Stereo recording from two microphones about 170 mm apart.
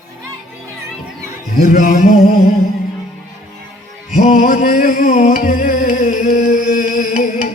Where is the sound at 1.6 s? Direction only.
50° left (ahead or behind).